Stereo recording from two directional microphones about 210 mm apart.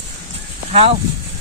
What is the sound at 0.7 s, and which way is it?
Speech, 30° right (ahead or behind).